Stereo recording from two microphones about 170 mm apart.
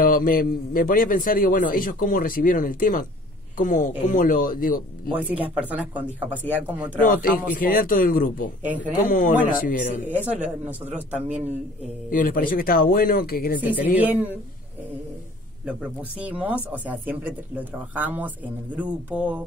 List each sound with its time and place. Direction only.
0.0 s a man's voice: 55° left (ahead or behind)
5.6 s speech: 10° right (ahead or behind)
7.0 s a man's voice: 55° left (ahead or behind)
8.6 s speech: 10° right (ahead or behind)
9.1 s a man's voice: 55° left (ahead or behind)
10.0 s speech: 10° right (ahead or behind)
12.1 s a man's voice: 55° left (ahead or behind)
13.6 s speech: 10° right (ahead or behind)
15.6 s speech: 5° right (ahead or behind)